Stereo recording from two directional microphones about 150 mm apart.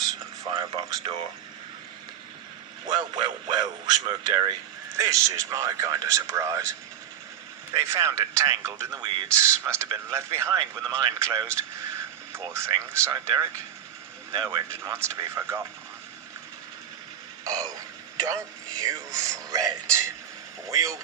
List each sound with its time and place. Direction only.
0.5 s speech: 30° right (ahead or behind)
2.8 s speech: 30° right (ahead or behind)
17.4 s a sound: 20° right (ahead or behind)
18.3 s speech: 20° right (ahead or behind)